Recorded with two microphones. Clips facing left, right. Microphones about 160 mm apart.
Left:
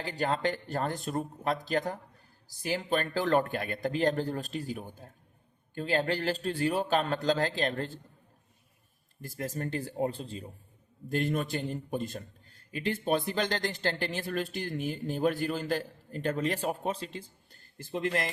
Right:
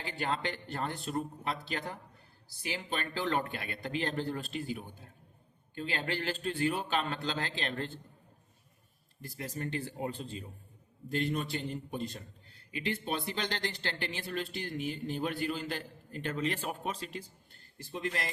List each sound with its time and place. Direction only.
0.0 s a man's voice: 40° left (ahead or behind)
9.2 s a man's voice: 45° left (ahead or behind)
11.1 s a man's voice: 50° left (ahead or behind); by 17.2 s 30° left (ahead or behind)
17.7 s speech: 55° left (ahead or behind)